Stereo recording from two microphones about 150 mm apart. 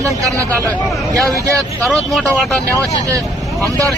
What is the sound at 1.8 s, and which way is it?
Speech, centre (ahead or behind).